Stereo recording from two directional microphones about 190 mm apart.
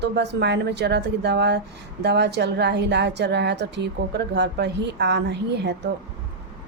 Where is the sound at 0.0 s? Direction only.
60° right (ahead or behind).